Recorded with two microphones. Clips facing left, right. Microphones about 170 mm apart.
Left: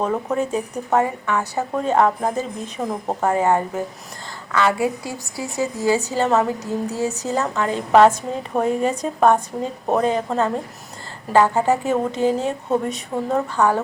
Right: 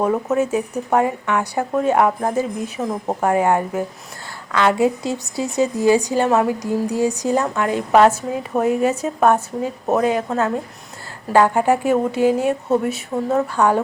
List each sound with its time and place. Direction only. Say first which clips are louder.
0.0 s a woman's voice: right 3 dB; 5° right (ahead or behind)